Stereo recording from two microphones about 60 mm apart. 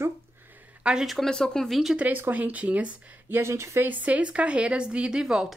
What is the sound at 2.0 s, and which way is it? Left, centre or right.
Speech, right.